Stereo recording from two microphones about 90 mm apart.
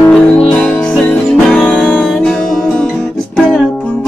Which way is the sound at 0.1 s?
10° left (ahead or behind).